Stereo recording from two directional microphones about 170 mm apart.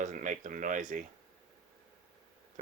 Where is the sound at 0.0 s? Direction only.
50° right (ahead or behind).